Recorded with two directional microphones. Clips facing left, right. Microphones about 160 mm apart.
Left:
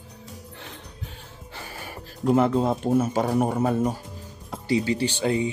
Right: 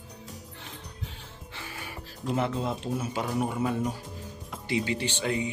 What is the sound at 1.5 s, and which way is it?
Speech, 40° left (ahead or behind).